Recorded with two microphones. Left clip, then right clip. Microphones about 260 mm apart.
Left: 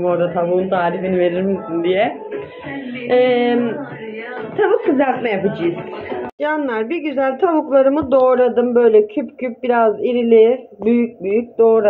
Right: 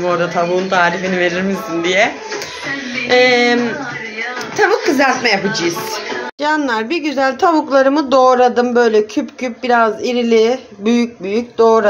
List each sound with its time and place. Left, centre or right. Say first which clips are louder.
0.0 s speech: right 1 dB; centre
3.1 s a woman's voice: right 3 dB; centre
4.6 s a woman's voice: right 2 dB; centre
6.4 s a woman's voice: right 3 dB; centre